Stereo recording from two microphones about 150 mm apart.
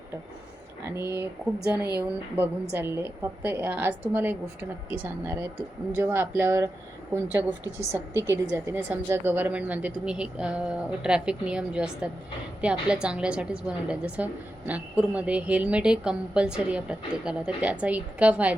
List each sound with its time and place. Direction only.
0.9 s a woman's voice: 15° right (ahead or behind)
12.9 s a woman's voice: 5° right (ahead or behind)